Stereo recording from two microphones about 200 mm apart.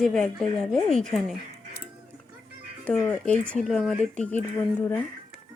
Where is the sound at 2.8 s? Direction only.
10° left (ahead or behind).